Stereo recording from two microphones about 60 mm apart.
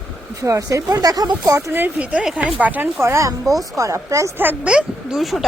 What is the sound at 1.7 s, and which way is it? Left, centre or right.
Speech, right.